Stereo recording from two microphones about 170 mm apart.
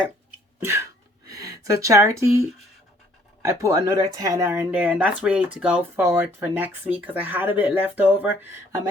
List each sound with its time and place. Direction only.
0.6 s speech: 15° right (ahead or behind)
3.4 s speech: 20° right (ahead or behind)